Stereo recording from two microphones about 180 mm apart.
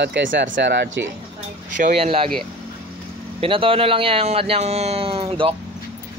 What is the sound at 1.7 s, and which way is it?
Speech, 45° right (ahead or behind).